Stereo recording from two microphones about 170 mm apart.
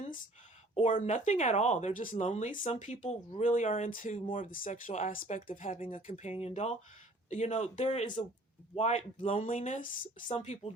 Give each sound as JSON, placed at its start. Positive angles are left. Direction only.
{"t": 0.8, "sound": "speech", "side_deg": 45}
{"t": 10.2, "sound": "speech", "side_deg": 40}